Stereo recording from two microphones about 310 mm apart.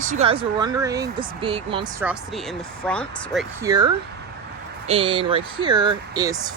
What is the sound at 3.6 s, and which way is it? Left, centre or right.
Speech, centre.